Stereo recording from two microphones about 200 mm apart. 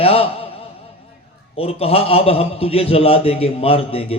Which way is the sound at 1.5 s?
30° left (ahead or behind).